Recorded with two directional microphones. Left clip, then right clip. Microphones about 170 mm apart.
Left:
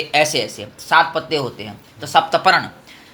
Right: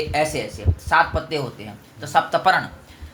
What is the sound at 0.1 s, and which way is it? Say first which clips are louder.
Speech: left 8 dB; 35° left (ahead or behind).